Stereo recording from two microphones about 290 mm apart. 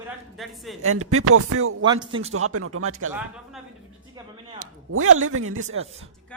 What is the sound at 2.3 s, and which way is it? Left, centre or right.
Speech, right.